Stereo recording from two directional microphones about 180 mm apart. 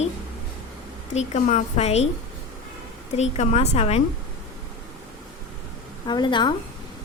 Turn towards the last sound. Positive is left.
turn(degrees=25)  # may be behind; listen again after turning